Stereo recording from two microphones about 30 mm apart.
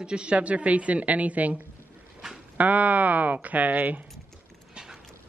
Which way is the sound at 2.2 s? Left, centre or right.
Centre.